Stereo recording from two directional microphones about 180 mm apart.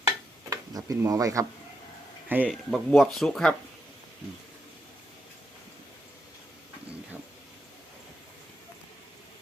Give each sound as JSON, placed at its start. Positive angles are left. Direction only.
{"t": 0.5, "sound": "speech", "side_deg": -20}
{"t": 2.3, "sound": "speech", "side_deg": -5}